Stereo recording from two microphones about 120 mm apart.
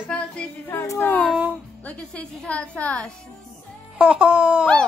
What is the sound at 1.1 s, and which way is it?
A child's voice, 10° left (ahead or behind).